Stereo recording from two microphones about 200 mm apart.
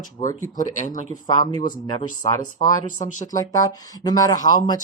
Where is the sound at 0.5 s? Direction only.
40° left (ahead or behind).